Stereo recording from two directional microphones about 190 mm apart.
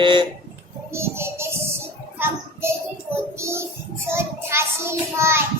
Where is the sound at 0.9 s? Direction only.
15° right (ahead or behind).